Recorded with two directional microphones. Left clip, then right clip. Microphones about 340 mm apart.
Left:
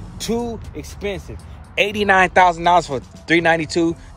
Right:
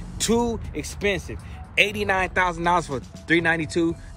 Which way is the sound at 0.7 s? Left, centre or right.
Centre.